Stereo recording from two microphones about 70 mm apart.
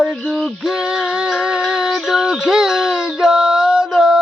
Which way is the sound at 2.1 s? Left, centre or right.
Centre.